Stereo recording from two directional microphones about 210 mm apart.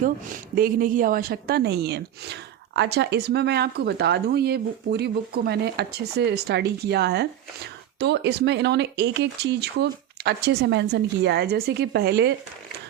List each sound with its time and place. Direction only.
0.5 s a woman's voice: 45° right (ahead or behind)